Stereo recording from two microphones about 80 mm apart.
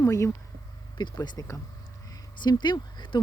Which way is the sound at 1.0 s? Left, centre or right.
Left.